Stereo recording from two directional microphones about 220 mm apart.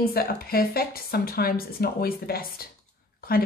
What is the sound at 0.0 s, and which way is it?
Speech, 45° left (ahead or behind).